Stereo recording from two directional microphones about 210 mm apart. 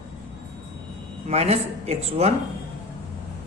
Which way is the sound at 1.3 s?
30° right (ahead or behind).